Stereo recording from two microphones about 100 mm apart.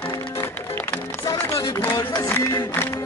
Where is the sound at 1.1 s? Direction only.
30° left (ahead or behind).